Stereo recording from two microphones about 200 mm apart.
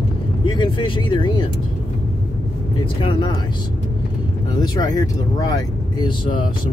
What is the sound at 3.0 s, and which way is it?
Speech, 25° left (ahead or behind).